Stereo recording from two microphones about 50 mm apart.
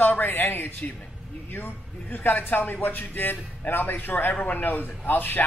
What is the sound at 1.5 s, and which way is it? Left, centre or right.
A man's voice, left.